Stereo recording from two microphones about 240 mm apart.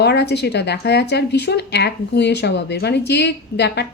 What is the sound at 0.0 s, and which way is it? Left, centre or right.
A woman's voice, left.